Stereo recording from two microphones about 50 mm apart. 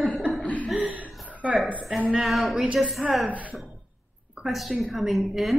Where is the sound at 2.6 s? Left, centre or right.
Centre.